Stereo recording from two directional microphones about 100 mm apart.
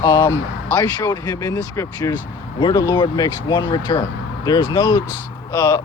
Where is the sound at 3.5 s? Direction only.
55° left (ahead or behind).